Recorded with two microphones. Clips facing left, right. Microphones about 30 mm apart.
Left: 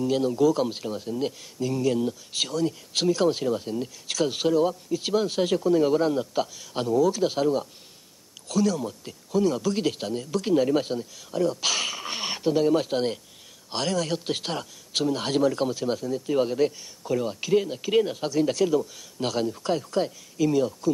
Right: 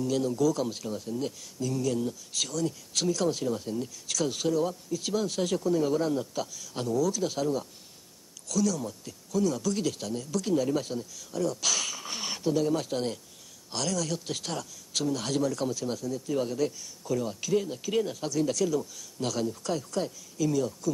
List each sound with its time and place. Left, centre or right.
0.0 s a man's voice: left